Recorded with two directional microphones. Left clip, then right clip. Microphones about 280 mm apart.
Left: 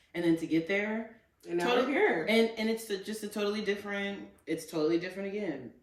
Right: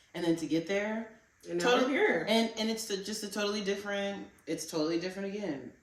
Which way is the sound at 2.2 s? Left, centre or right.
Centre.